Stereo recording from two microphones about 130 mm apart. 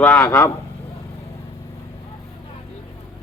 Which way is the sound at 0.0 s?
15° left (ahead or behind).